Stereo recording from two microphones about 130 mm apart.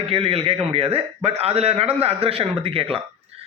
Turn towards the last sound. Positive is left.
turn(degrees=-45)  # may be behind; listen again after turning